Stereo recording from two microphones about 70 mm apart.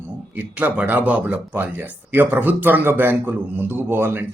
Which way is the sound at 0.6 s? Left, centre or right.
Right.